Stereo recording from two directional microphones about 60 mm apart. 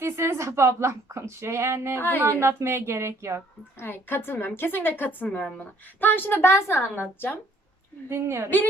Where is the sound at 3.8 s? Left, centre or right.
Left.